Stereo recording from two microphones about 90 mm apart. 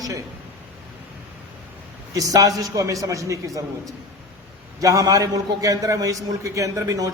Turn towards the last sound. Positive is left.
turn(degrees=-40)  # may be behind; listen again after turning